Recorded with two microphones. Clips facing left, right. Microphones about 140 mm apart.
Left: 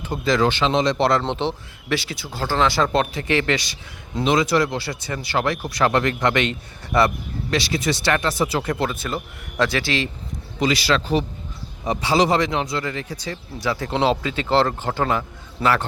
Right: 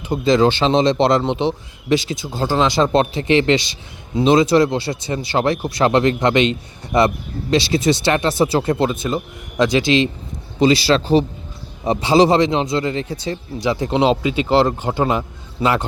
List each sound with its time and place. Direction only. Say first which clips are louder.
0.3 s a man's voice: right 5 dB; 25° right (ahead or behind)